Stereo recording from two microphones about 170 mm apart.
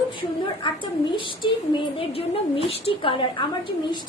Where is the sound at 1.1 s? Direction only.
30° left (ahead or behind).